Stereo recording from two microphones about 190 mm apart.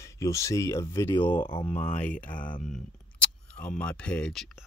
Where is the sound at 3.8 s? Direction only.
5° left (ahead or behind).